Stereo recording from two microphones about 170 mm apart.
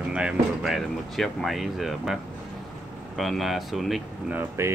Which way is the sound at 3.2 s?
Centre (ahead or behind).